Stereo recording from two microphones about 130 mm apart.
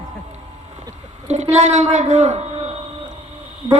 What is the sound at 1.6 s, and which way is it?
Speech, 65° right (ahead or behind).